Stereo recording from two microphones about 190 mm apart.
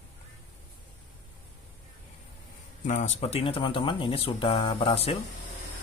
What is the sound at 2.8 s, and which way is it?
Speech, 40° left (ahead or behind).